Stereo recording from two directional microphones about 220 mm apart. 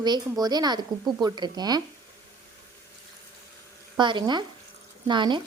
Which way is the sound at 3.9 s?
20° right (ahead or behind).